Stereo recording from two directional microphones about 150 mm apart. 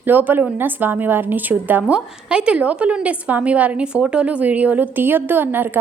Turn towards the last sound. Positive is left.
turn(degrees=-15)  # may be behind; listen again after turning